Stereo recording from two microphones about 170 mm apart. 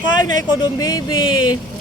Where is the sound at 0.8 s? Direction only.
20° left (ahead or behind).